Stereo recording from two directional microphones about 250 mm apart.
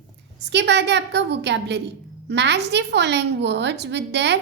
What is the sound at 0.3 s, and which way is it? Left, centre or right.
A woman's voice, right.